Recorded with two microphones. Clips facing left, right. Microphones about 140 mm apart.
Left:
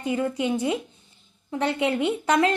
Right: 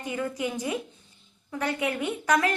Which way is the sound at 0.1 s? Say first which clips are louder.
Left 6 dB; 25° left (ahead or behind).